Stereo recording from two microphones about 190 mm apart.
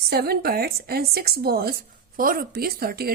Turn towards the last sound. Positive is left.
turn(degrees=-55)  # may be behind; listen again after turning